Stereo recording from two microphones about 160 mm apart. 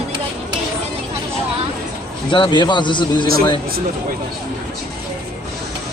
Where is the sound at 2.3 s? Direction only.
30° left (ahead or behind).